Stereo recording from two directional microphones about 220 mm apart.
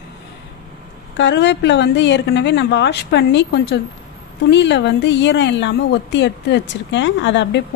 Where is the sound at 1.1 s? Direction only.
55° left (ahead or behind).